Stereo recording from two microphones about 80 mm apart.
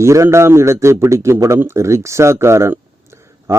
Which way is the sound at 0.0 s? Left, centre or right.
Right.